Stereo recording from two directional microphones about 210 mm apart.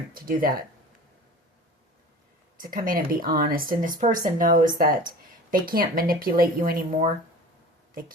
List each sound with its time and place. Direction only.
0.1 s speech: 45° right (ahead or behind)
2.6 s speech: 40° right (ahead or behind)